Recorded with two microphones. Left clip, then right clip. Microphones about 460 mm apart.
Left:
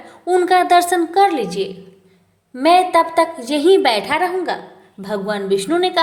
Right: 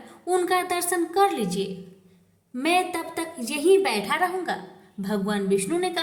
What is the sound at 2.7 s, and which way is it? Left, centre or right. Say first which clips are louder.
A woman's voice: left 12 dB; right.